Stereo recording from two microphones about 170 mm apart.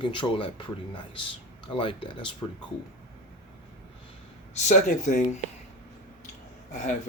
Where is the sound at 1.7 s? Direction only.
30° left (ahead or behind).